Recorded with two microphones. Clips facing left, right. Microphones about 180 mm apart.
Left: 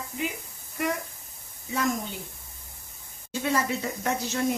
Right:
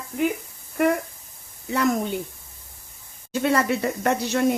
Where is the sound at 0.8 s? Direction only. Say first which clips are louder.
Right 8 dB; 55° right (ahead or behind).